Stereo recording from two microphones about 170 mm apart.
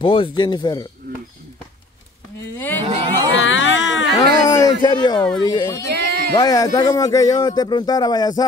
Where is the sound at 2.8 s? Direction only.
35° right (ahead or behind).